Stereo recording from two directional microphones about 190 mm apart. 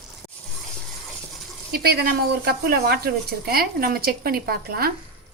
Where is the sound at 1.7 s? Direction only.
55° right (ahead or behind).